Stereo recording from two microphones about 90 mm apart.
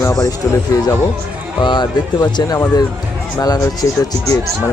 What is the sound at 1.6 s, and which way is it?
Speech, 60° left (ahead or behind).